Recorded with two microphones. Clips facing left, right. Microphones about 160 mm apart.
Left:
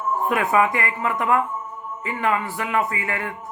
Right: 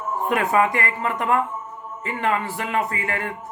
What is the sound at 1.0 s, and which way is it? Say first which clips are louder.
Speech: left 1 dB; 30° right (ahead or behind).